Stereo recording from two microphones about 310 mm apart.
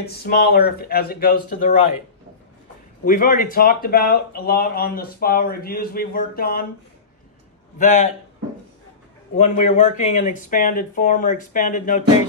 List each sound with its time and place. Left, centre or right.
0.0 s speech: left
3.1 s speech: left
7.8 s speech: left
9.4 s speech: left